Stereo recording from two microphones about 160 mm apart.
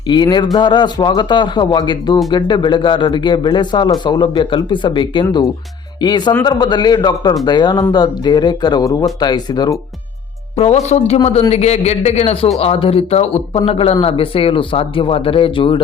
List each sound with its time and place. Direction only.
0.1 s speech: 30° left (ahead or behind)
10.6 s a woman's voice: 45° left (ahead or behind)